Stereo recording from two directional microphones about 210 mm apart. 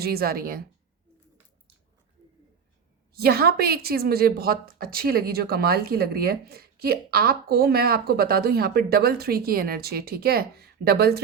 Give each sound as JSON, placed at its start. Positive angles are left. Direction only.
{"t": 0.0, "sound": "speech", "side_deg": -45}
{"t": 3.1, "sound": "speech", "side_deg": -45}